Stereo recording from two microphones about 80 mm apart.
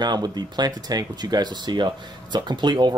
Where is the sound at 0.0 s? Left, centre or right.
Right.